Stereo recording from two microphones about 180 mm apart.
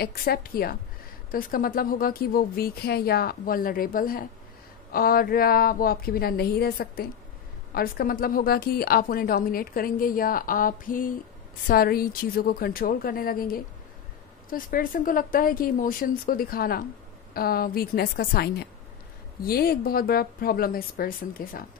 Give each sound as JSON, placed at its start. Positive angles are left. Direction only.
{"t": 0.0, "sound": "a woman's voice", "side_deg": 55}